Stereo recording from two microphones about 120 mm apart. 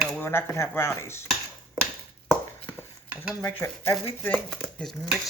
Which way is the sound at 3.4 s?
20° left (ahead or behind).